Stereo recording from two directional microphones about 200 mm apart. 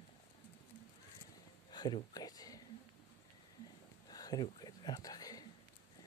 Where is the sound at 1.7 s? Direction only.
20° left (ahead or behind).